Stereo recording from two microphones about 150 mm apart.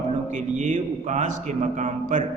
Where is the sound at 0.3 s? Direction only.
55° right (ahead or behind).